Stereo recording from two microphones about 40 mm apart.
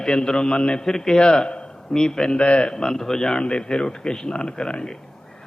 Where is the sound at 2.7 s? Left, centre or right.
Centre.